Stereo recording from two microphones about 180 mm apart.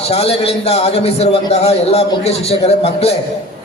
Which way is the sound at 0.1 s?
35° left (ahead or behind).